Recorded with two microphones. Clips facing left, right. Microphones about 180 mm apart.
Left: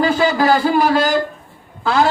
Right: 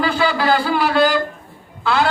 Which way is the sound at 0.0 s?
45° left (ahead or behind).